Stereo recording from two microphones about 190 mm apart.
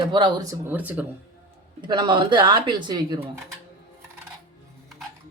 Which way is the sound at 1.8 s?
25° right (ahead or behind).